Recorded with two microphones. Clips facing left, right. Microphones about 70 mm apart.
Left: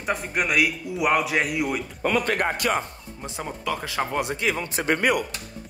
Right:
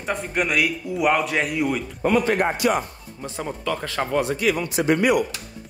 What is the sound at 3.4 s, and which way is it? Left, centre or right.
A man's voice, centre.